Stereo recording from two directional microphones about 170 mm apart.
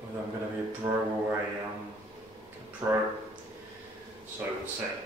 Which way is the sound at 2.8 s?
20° right (ahead or behind).